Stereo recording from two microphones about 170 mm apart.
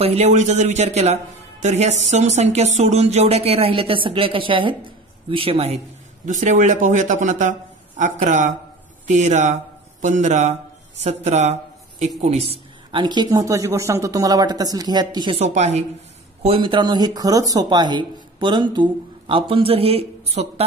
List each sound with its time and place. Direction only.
0.0 s a man's voice: 40° right (ahead or behind)
6.2 s speech: 45° right (ahead or behind); by 15.4 s 25° right (ahead or behind)
15.4 s a man's voice: 40° right (ahead or behind)
16.4 s speech: 30° right (ahead or behind)